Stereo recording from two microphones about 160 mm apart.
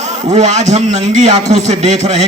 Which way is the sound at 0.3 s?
45° right (ahead or behind).